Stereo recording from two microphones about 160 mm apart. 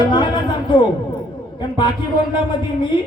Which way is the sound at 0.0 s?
30° left (ahead or behind).